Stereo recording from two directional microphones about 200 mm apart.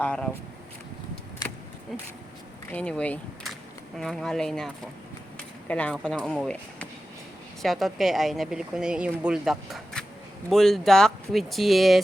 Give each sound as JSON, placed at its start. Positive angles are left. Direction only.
{"t": 0.0, "sound": "speech", "side_deg": 5}
{"t": 2.6, "sound": "speech", "side_deg": 5}